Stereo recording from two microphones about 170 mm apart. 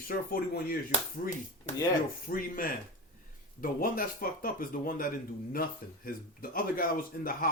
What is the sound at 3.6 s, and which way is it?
Speech, 55° left (ahead or behind).